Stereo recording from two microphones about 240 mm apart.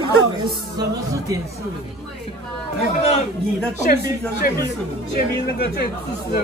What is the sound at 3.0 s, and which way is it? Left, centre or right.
Speech, left.